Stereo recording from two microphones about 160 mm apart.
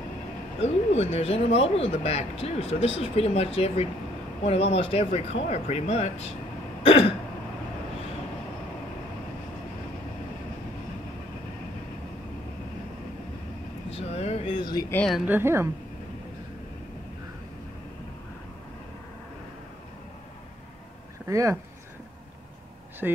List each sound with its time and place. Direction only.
0.6 s speech: 40° left (ahead or behind)
6.8 s throat clearing: 35° left (ahead or behind)
13.9 s a sound: 40° left (ahead or behind)
14.9 s speech: 10° left (ahead or behind)
15.1 s a woman's voice: 10° right (ahead or behind)
21.3 s speech: 20° right (ahead or behind)
23.0 s a woman's voice: 10° right (ahead or behind)